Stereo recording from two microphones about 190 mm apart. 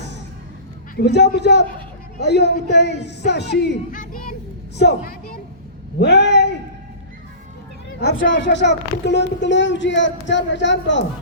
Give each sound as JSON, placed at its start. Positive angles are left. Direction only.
{"t": 0.9, "sound": "speech", "side_deg": 60}
{"t": 3.9, "sound": "a child's voice", "side_deg": 45}
{"t": 4.8, "sound": "speech", "side_deg": 60}
{"t": 7.9, "sound": "speech", "side_deg": 80}